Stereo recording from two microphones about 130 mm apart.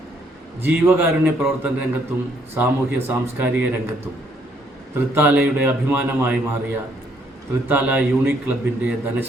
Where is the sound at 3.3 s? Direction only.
15° right (ahead or behind).